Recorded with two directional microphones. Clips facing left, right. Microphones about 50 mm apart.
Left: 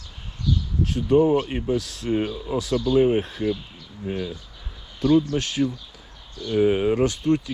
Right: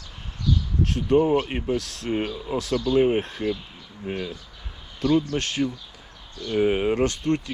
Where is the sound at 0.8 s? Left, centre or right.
Right.